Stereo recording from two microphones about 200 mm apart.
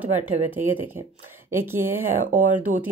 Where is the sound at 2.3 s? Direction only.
40° right (ahead or behind).